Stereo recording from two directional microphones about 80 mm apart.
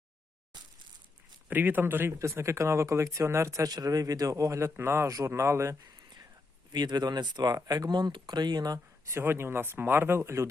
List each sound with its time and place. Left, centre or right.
1.5 s speech: right
5.8 s a sound: right
6.7 s speech: right
9.0 s speech: right